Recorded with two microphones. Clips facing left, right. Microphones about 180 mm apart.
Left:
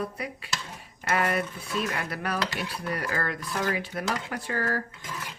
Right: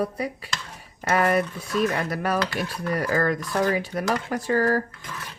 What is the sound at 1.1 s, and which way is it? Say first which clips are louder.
Speech: right 5 dB; 40° right (ahead or behind).